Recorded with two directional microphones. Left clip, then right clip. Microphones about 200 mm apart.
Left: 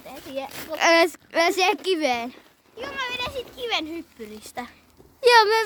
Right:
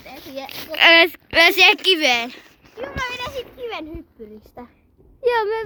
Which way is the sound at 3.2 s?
15° left (ahead or behind).